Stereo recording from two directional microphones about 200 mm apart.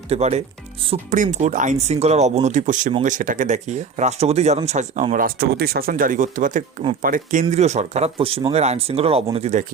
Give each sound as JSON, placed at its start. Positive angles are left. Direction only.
{"t": 0.1, "sound": "speech", "side_deg": -35}
{"t": 1.1, "sound": "speech", "side_deg": -40}